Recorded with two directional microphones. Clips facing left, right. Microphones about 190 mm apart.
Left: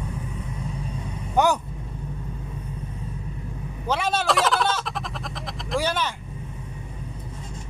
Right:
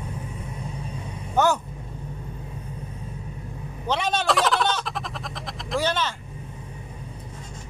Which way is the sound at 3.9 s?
5° left (ahead or behind).